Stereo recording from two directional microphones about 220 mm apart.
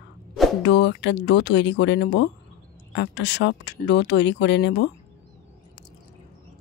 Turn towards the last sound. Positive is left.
turn(degrees=50)  # may be behind; listen again after turning